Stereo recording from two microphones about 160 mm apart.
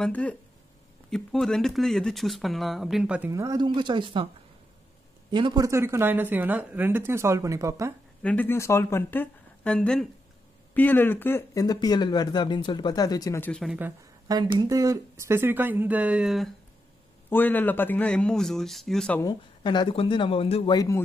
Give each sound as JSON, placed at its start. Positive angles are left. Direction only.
{"t": 0.0, "sound": "speech", "side_deg": 10}
{"t": 3.3, "sound": "speech", "side_deg": -20}
{"t": 5.3, "sound": "speech", "side_deg": -25}
{"t": 8.2, "sound": "speech", "side_deg": 10}
{"t": 13.5, "sound": "speech", "side_deg": 0}
{"t": 14.2, "sound": "speech", "side_deg": -25}
{"t": 17.3, "sound": "speech", "side_deg": 10}
{"t": 19.2, "sound": "speech", "side_deg": 30}
{"t": 20.7, "sound": "speech", "side_deg": 20}